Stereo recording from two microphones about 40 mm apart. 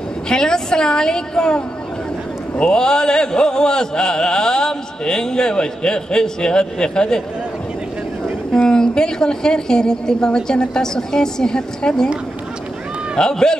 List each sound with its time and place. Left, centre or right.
0.3 s a woman's voice: centre
2.5 s chant: left
8.6 s a woman's voice: centre
13.2 s a woman's voice: centre